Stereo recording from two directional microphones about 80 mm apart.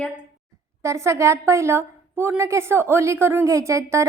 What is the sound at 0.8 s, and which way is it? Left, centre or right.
A woman's voice, right.